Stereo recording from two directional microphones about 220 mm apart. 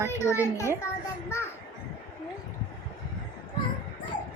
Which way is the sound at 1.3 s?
10° left (ahead or behind).